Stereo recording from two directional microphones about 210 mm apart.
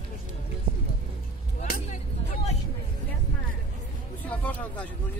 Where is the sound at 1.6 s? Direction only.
35° left (ahead or behind).